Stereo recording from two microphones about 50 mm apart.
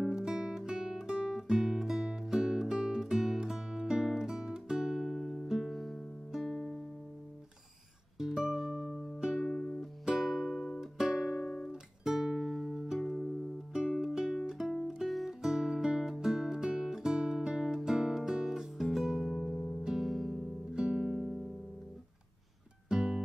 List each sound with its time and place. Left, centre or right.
0.1 s music: centre
8.2 s music: centre
9.5 s music: centre
9.8 s music: centre
11.4 s music: centre
11.7 s music: centre
13.0 s music: centre
14.1 s music: centre
15.4 s music: centre
20.7 s music: centre
21.2 s music: centre
22.8 s music: centre